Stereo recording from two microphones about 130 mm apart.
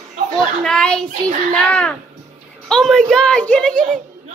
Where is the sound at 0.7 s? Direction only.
5° left (ahead or behind).